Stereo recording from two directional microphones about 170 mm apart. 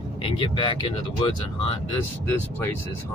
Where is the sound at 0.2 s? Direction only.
30° left (ahead or behind).